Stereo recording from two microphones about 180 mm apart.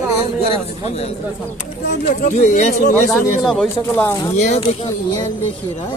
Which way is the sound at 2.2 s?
40° left (ahead or behind).